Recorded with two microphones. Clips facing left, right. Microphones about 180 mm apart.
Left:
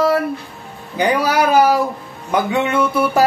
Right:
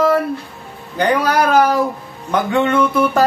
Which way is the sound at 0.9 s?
10° left (ahead or behind).